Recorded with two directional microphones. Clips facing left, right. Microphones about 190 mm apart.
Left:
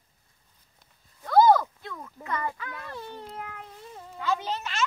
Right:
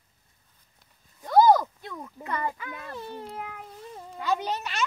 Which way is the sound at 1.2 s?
15° right (ahead or behind).